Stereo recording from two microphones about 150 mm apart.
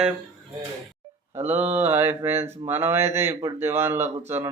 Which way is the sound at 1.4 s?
10° right (ahead or behind).